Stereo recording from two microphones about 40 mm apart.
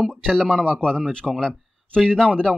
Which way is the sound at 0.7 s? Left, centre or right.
Left.